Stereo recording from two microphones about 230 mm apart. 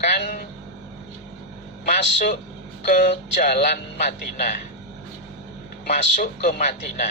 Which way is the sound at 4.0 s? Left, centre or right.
Left.